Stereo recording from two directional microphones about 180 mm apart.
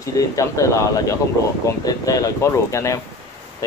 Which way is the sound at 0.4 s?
15° left (ahead or behind).